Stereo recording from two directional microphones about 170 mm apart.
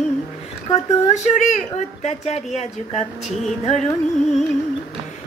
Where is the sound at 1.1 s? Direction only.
45° left (ahead or behind).